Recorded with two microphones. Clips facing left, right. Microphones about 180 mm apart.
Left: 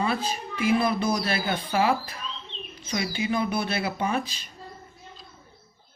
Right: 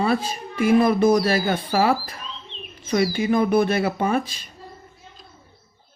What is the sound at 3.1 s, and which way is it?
Speech, 50° right (ahead or behind).